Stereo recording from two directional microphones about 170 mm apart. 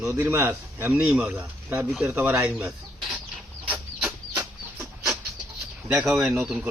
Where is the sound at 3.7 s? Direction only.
5° right (ahead or behind).